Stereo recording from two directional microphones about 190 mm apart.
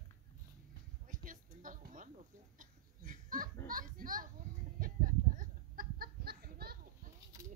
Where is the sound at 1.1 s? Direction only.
45° right (ahead or behind).